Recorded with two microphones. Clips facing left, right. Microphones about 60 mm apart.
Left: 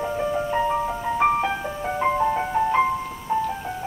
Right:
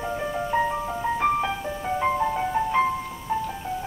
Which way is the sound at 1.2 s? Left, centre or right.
Centre.